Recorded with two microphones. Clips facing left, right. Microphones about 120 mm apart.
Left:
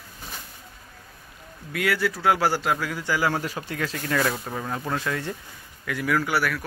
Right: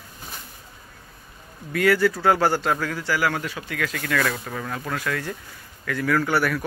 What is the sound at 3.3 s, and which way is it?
Speech, 35° left (ahead or behind).